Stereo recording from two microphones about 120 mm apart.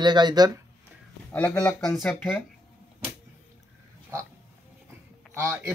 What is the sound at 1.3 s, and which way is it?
Speech, 10° left (ahead or behind).